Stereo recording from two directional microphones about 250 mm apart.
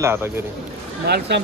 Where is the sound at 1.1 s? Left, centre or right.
Right.